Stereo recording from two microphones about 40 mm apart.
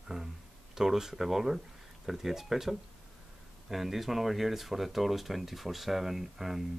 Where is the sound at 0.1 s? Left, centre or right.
Centre.